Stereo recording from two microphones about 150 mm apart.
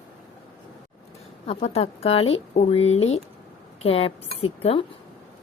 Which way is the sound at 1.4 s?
45° left (ahead or behind).